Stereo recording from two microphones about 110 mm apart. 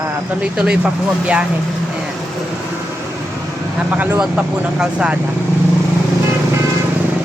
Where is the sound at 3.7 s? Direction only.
15° right (ahead or behind).